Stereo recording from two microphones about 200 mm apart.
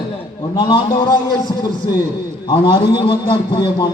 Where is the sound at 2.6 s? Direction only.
25° left (ahead or behind).